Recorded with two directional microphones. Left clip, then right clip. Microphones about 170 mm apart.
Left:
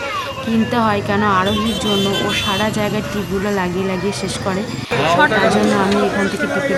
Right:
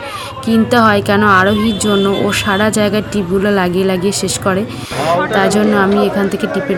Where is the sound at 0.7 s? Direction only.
25° right (ahead or behind).